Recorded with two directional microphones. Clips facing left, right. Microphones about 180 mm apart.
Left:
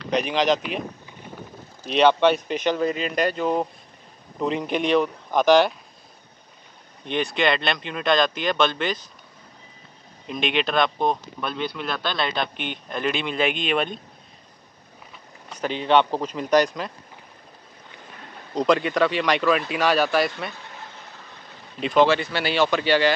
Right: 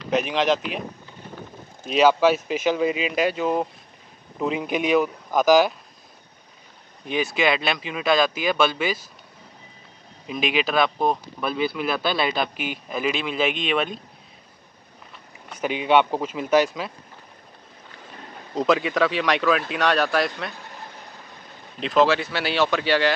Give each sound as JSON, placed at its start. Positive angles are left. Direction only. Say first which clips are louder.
{"t": 0.0, "sound": "speech", "louder": "even", "side_deg": 0}
{"t": 1.9, "sound": "speech", "louder": "even", "side_deg": -5}
{"t": 7.1, "sound": "speech", "louder": "even", "side_deg": -5}
{"t": 10.2, "sound": "speech", "louder": "right 1 dB", "side_deg": -5}
{"t": 15.5, "sound": "speech", "louder": "even", "side_deg": -10}
{"t": 18.5, "sound": "speech", "louder": "left 1 dB", "side_deg": 0}
{"t": 21.7, "sound": "speech", "louder": "left 1 dB", "side_deg": 0}